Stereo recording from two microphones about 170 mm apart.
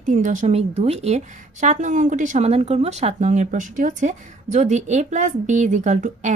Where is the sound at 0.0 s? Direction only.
50° right (ahead or behind).